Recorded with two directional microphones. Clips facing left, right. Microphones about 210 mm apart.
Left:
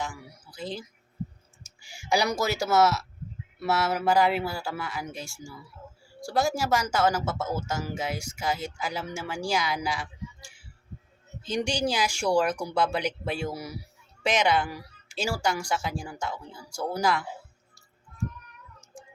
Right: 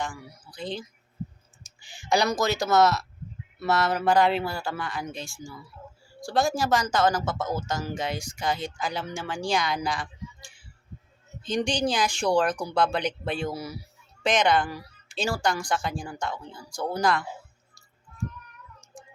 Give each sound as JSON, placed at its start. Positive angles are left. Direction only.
{"t": 0.0, "sound": "speech", "side_deg": 5}